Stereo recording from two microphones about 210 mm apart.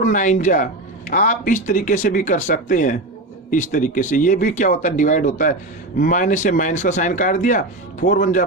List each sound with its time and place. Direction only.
0.0 s speech: 35° left (ahead or behind)